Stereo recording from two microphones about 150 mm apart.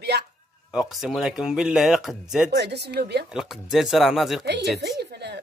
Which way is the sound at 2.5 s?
90° right.